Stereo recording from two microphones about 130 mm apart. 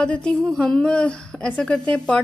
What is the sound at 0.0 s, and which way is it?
A woman's voice, 5° left (ahead or behind).